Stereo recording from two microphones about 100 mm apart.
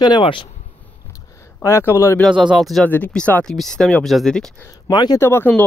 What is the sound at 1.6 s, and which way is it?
Speech, 25° left (ahead or behind).